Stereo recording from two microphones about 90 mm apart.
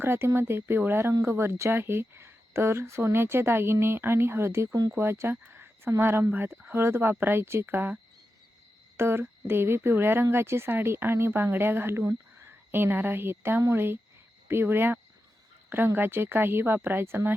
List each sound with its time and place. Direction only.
0.0 s speech: 25° right (ahead or behind)
9.0 s speech: 25° right (ahead or behind)